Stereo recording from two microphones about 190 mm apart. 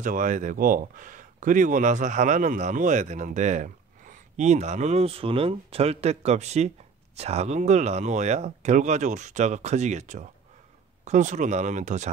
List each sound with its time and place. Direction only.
0.0 s speech: 45° right (ahead or behind)